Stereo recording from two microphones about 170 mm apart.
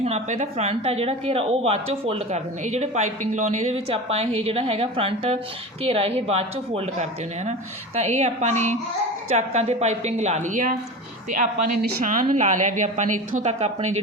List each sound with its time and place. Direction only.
0.0 s a woman's voice: 40° right (ahead or behind)